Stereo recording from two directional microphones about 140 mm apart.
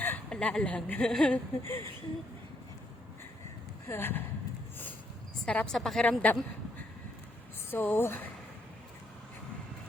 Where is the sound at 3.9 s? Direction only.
15° left (ahead or behind).